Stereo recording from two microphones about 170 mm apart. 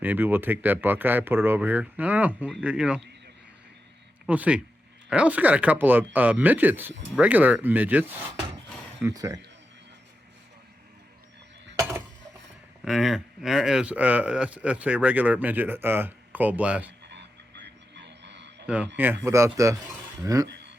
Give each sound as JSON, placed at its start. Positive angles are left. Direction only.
{"t": 0.0, "sound": "speech", "side_deg": -10}
{"t": 4.3, "sound": "speech", "side_deg": -10}
{"t": 11.8, "sound": "a sound", "side_deg": -15}
{"t": 12.8, "sound": "speech", "side_deg": 0}
{"t": 17.1, "sound": "a sound", "side_deg": -90}
{"t": 18.6, "sound": "a man's voice", "side_deg": -10}